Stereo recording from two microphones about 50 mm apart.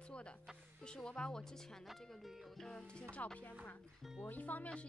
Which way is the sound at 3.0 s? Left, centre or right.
Left.